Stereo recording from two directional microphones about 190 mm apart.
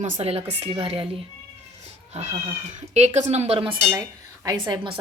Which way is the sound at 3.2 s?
35° right (ahead or behind).